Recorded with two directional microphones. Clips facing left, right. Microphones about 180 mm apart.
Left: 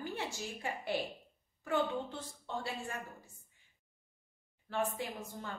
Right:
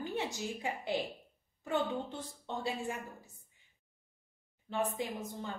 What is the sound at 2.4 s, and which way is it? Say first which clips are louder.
Speech: right 4 dB; 15° right (ahead or behind).